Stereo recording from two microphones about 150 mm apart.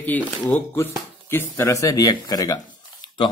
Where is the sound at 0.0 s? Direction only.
10° left (ahead or behind).